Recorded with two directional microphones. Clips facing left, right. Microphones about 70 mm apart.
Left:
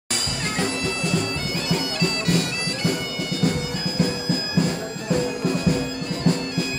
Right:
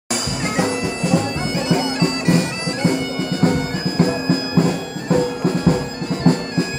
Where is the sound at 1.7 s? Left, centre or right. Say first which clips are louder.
Right 6 dB; right.